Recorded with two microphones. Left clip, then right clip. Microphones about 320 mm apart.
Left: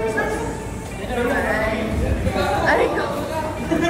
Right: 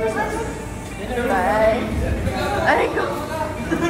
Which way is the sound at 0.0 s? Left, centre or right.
Centre.